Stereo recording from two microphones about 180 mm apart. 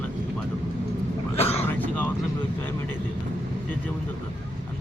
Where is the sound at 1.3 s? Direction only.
35° left (ahead or behind).